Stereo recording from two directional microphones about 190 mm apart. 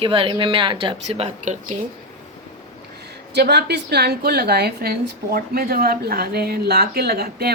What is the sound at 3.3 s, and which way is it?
A woman's voice, 60° right (ahead or behind).